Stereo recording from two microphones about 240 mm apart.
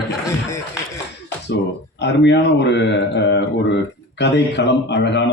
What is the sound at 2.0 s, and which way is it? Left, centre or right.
Speech, left.